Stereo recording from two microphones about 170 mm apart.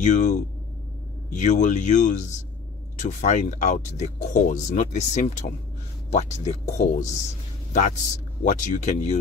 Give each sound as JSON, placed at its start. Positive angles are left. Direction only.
{"t": 0.0, "sound": "a man's voice", "side_deg": 45}